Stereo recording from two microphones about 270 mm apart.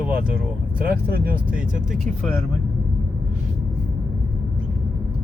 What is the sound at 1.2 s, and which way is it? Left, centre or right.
Speech, right.